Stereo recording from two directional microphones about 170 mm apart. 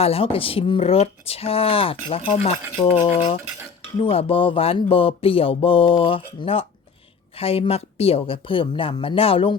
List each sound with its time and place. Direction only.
0.0 s speech: 35° left (ahead or behind)